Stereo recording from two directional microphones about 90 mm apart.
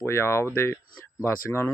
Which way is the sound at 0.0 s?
30° left (ahead or behind).